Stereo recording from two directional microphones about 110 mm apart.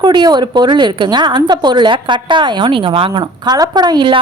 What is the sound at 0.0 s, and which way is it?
A woman's voice, 40° right (ahead or behind).